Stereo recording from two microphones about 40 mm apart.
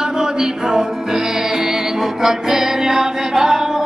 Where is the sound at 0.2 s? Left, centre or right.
Centre.